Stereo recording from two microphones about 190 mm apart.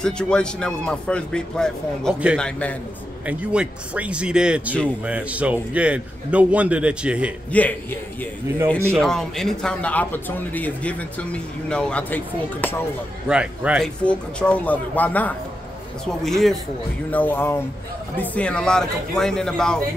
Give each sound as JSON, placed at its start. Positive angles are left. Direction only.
{"t": 0.0, "sound": "speech", "side_deg": 5}
{"t": 3.3, "sound": "a man's voice", "side_deg": -5}
{"t": 7.5, "sound": "speech", "side_deg": 10}
{"t": 13.3, "sound": "speech", "side_deg": -5}
{"t": 14.0, "sound": "speech", "side_deg": 5}